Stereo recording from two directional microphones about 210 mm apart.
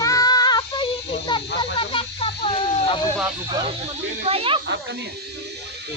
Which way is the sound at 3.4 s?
20° right (ahead or behind).